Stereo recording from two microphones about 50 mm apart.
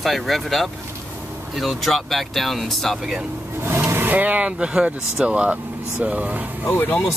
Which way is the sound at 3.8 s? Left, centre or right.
Right.